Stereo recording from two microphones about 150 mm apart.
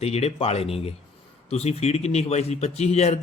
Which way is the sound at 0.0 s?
45° left (ahead or behind).